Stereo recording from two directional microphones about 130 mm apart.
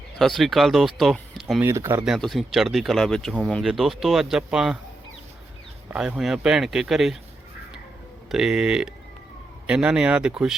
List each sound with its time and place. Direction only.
0.2 s speech: centre (ahead or behind)
1.6 s speech: 20° right (ahead or behind)
2.0 s speech: centre (ahead or behind)
5.9 s speech: 5° right (ahead or behind)
8.3 s speech: 5° right (ahead or behind)